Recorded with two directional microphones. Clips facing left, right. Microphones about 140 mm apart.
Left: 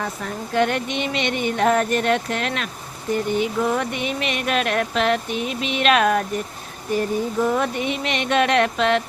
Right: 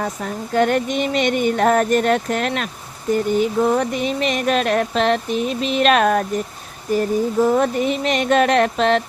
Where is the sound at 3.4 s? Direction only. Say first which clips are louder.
Right 4 dB; 35° right (ahead or behind).